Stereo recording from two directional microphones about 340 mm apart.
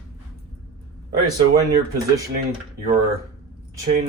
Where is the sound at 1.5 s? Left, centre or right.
Centre.